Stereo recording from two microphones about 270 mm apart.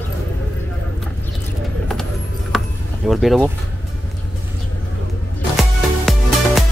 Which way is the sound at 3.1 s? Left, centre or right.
Centre.